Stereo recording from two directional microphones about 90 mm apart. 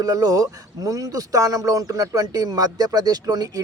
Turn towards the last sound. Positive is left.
turn(degrees=-40)  # may be behind; listen again after turning